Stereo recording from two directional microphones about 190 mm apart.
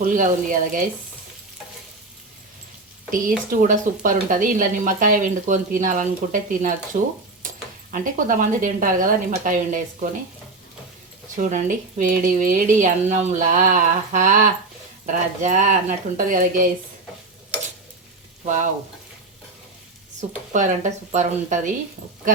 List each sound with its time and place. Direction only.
0.0 s speech: 45° right (ahead or behind)
3.1 s speech: 45° right (ahead or behind)
11.3 s speech: 40° right (ahead or behind)
20.5 s speech: 40° right (ahead or behind)